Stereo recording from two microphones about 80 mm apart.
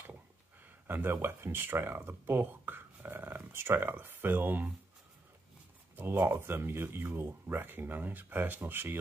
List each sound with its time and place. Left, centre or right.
0.8 s speech: right
5.9 s speech: right